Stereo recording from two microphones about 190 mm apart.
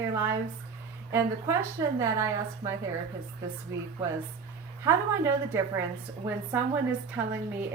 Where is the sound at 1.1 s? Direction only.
15° right (ahead or behind).